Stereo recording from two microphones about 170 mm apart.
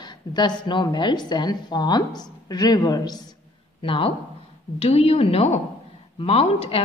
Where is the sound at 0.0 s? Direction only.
25° left (ahead or behind).